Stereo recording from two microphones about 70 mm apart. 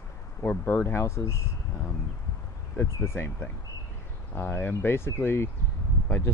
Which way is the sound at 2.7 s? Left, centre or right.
Left.